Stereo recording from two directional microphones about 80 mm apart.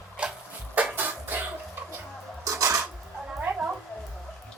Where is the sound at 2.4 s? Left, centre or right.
Right.